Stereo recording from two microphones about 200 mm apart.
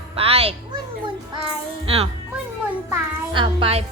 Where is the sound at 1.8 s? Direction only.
30° right (ahead or behind).